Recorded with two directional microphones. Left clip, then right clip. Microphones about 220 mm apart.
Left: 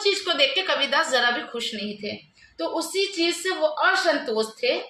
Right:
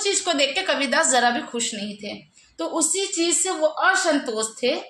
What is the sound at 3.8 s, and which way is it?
Speech, 35° right (ahead or behind).